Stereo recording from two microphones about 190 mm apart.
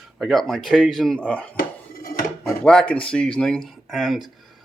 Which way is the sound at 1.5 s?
50° left (ahead or behind).